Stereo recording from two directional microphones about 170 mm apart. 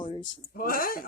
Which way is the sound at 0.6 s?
55° left (ahead or behind).